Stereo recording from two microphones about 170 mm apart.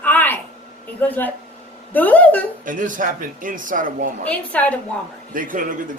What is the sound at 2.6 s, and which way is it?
A man's voice, 50° right (ahead or behind).